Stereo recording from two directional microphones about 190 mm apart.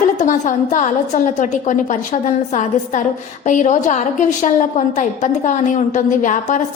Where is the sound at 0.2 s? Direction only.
40° left (ahead or behind).